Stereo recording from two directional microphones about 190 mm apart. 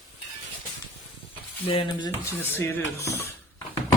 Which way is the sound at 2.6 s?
10° left (ahead or behind).